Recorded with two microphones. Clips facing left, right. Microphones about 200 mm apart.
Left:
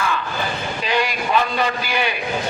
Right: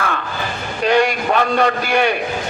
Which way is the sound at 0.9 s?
50° right (ahead or behind).